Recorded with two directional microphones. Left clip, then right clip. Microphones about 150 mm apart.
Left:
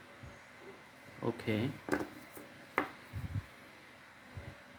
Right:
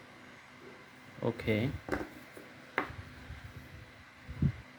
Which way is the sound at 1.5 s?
35° right (ahead or behind).